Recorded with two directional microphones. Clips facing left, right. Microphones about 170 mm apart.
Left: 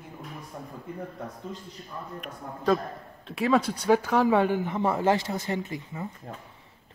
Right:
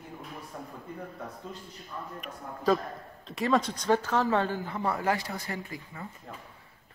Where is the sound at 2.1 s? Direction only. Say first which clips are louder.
Left 2 dB; centre (ahead or behind).